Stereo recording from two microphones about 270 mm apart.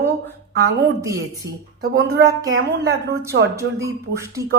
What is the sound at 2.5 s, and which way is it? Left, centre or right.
Speech, right.